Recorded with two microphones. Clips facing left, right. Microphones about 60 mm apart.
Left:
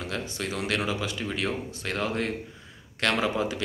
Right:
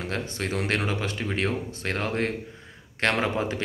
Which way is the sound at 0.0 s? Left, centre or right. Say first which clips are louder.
Right 2 dB; right.